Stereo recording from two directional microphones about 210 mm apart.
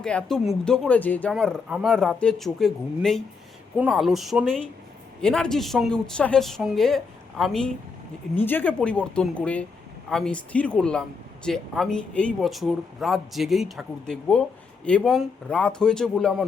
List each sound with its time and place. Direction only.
0.0 s speech: 5° left (ahead or behind)